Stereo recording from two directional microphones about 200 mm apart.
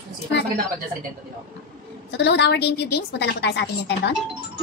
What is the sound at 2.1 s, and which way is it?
A woman's voice, 55° left (ahead or behind).